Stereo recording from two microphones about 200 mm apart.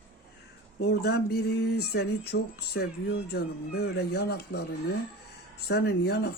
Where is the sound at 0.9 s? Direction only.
55° left (ahead or behind).